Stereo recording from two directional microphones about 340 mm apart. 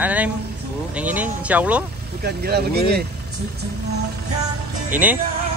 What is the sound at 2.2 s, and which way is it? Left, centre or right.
Speech, right.